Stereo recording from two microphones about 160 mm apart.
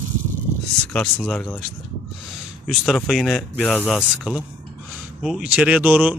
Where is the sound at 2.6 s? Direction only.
Centre (ahead or behind).